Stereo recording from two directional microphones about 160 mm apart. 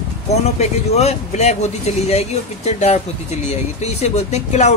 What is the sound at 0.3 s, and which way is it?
A man's voice, 40° left (ahead or behind).